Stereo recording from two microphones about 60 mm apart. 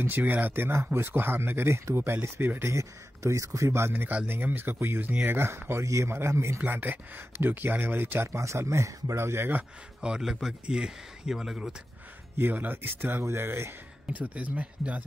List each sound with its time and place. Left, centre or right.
0.0 s speech: right
3.9 s speech: right
6.6 s speech: right
8.3 s speech: right
9.6 s speech: centre
12.4 s speech: right
14.0 s speech: right